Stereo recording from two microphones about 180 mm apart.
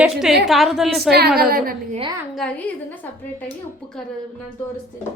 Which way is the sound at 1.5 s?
55° right (ahead or behind).